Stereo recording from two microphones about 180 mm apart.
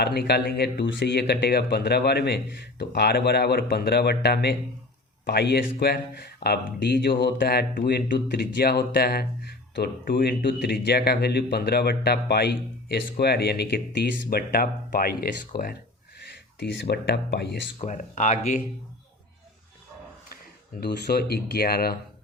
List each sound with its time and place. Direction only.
0.0 s speech: 65° left (ahead or behind)
16.6 s speech: 70° left (ahead or behind)
17.7 s speech: 45° left (ahead or behind)
20.8 s speech: 60° left (ahead or behind)